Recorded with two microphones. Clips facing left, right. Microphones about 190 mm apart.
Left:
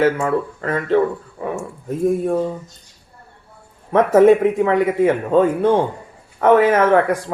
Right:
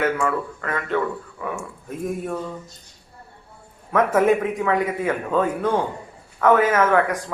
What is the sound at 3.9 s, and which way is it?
Speech, 30° left (ahead or behind).